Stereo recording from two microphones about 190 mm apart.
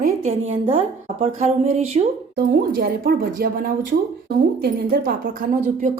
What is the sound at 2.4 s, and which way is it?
A woman's voice, 50° right (ahead or behind).